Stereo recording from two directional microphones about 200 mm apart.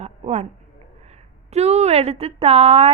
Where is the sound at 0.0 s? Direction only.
30° right (ahead or behind).